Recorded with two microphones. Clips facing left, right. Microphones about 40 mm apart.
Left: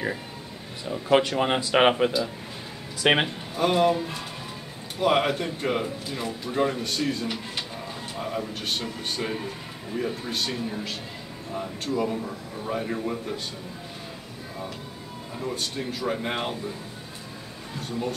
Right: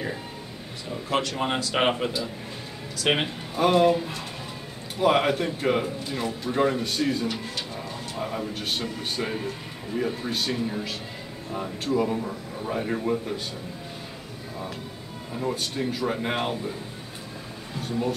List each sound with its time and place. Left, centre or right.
1.0 s speech: centre
3.0 s speech: left
3.5 s speech: centre
15.3 s speech: centre
17.8 s speech: centre